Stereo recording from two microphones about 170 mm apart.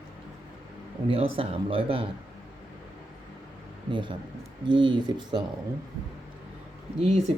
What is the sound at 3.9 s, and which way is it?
A man's voice, 30° right (ahead or behind).